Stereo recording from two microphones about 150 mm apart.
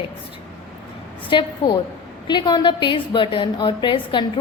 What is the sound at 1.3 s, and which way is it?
A woman's voice, 30° left (ahead or behind).